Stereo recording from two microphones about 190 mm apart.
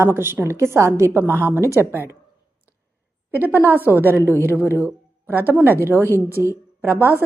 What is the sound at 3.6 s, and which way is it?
A woman's voice, 10° right (ahead or behind).